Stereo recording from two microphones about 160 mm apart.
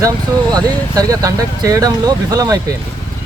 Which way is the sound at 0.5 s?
25° right (ahead or behind).